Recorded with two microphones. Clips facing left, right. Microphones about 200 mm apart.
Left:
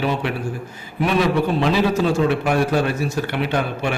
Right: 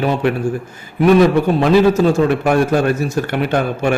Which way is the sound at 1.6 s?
45° right (ahead or behind).